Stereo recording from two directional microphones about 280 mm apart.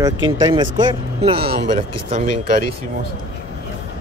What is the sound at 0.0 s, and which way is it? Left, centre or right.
Speech, centre.